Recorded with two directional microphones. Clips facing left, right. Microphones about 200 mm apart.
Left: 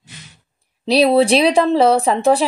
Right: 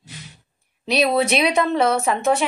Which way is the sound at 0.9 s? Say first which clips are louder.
Left 6 dB; 30° left (ahead or behind).